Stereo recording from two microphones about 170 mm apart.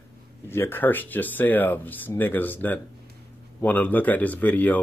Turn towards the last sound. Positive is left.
turn(degrees=10)  # may be behind; listen again after turning